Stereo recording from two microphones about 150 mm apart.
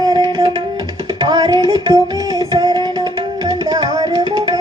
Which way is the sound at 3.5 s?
25° right (ahead or behind).